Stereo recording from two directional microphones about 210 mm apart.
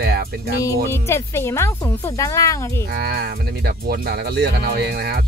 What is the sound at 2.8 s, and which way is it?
Speech, 45° right (ahead or behind).